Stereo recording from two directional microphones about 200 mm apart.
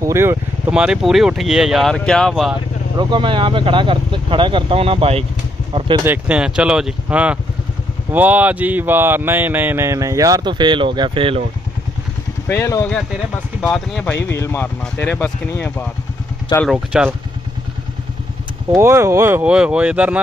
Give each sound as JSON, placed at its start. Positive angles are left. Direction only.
{"t": 0.0, "sound": "speech", "side_deg": -15}
{"t": 3.0, "sound": "speech", "side_deg": -25}
{"t": 6.0, "sound": "speech", "side_deg": -5}
{"t": 12.4, "sound": "speech", "side_deg": 15}
{"t": 16.7, "sound": "speech", "side_deg": -5}
{"t": 18.7, "sound": "speech", "side_deg": -15}